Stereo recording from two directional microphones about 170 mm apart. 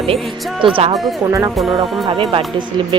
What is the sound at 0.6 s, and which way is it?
Speech, 30° right (ahead or behind).